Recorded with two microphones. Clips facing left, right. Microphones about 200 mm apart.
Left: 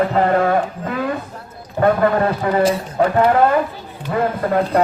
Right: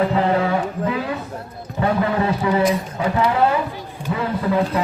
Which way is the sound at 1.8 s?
50° left (ahead or behind).